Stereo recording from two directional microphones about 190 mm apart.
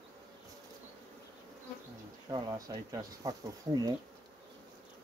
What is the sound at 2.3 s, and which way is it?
Speech, 20° right (ahead or behind).